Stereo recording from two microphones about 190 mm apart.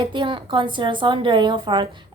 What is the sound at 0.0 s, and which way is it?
A woman's voice, 25° right (ahead or behind).